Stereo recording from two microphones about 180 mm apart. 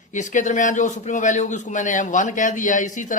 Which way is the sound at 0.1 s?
45° left (ahead or behind).